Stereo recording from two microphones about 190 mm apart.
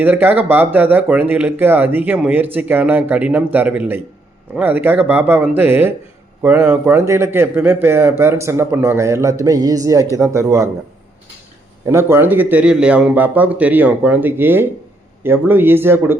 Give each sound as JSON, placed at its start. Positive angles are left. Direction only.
{"t": 0.0, "sound": "speech", "side_deg": -10}
{"t": 11.9, "sound": "speech", "side_deg": -15}